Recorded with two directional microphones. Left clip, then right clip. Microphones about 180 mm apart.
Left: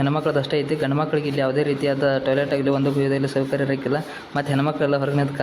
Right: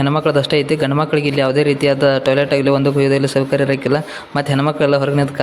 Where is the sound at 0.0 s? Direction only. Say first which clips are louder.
Right 6 dB; 30° right (ahead or behind).